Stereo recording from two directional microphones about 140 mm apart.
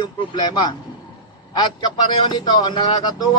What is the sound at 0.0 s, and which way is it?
A man's voice, 30° left (ahead or behind).